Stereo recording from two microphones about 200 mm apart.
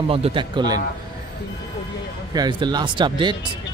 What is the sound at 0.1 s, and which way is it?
Speech, 25° right (ahead or behind).